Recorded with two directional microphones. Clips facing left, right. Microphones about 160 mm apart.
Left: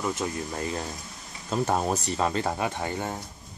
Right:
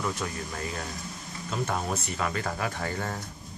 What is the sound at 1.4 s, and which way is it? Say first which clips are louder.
Speech: left 5 dB; 35° left (ahead or behind).